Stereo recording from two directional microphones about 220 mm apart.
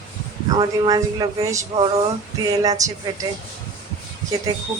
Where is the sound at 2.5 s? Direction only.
15° right (ahead or behind).